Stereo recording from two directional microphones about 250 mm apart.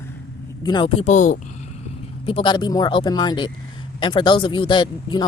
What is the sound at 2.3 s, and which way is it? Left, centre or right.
Speech, centre.